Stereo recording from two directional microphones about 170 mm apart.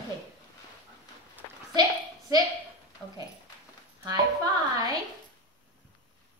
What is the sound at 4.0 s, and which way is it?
Music, 20° right (ahead or behind).